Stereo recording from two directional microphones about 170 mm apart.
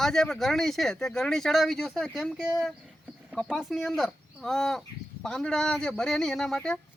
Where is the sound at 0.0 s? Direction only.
5° left (ahead or behind).